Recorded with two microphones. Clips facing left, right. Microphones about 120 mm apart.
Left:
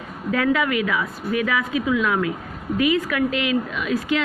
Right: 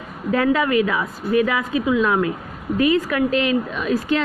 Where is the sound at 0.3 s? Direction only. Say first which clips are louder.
Right 2 dB; 35° right (ahead or behind).